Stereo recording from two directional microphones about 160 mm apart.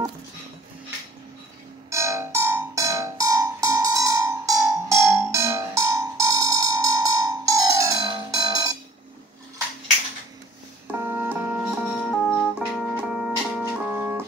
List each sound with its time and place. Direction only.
1.9 s music: 20° right (ahead or behind)
10.9 s music: 15° right (ahead or behind)